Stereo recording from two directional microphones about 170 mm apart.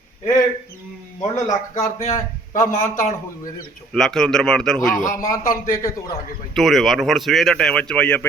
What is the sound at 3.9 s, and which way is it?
Speech, centre (ahead or behind).